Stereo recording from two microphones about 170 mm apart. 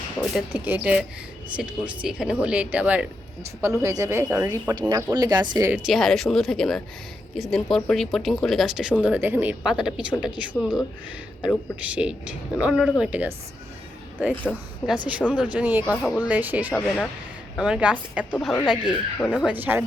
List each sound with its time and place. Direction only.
0.5 s speech: 10° right (ahead or behind)
3.6 s speech: 20° right (ahead or behind)
5.7 s speech: centre (ahead or behind)
14.5 s speech: 10° left (ahead or behind)
14.8 s speech: 5° right (ahead or behind)
16.0 s speech: centre (ahead or behind)
16.2 s speech: 10° right (ahead or behind)
18.3 s speech: 10° left (ahead or behind)
18.7 s speech: 5° right (ahead or behind)